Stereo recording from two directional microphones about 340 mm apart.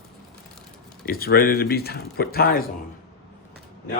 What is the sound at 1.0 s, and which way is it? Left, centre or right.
Speech, left.